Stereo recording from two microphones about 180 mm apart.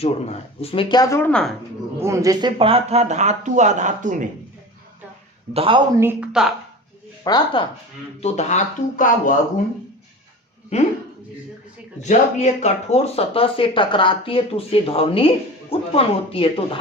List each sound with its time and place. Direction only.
0.0 s speech: 35° left (ahead or behind)
1.2 s a woman's voice: 5° left (ahead or behind)
2.0 s speech: 15° right (ahead or behind); by 4.3 s 45° right (ahead or behind)
5.5 s speech: 30° right (ahead or behind)
6.0 s speech: 10° right (ahead or behind)
7.3 s speech: 20° left (ahead or behind)
8.2 s speech: 40° left (ahead or behind)
10.7 s speech: 40° left (ahead or behind)
12.0 s speech: 40° left (ahead or behind)